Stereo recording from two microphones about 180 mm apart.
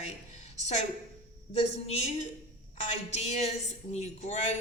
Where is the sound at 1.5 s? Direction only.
35° left (ahead or behind).